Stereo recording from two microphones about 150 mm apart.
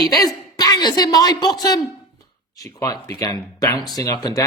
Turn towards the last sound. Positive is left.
turn(degrees=25)  # may be behind; listen again after turning